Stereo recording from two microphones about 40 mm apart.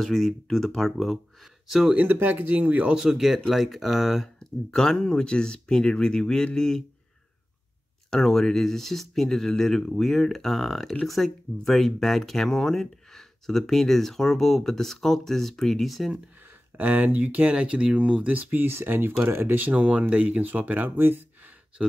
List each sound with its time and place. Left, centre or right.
0.0 s speech: centre
2.2 s speech: right
3.0 s speech: centre
4.4 s speech: centre
8.1 s speech: centre
16.7 s speech: right
18.7 s speech: right
19.5 s speech: right